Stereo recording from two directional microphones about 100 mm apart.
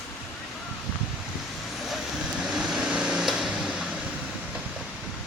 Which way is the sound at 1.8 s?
Centre (ahead or behind).